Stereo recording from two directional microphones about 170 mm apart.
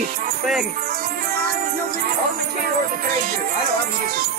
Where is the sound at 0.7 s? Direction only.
60° right (ahead or behind).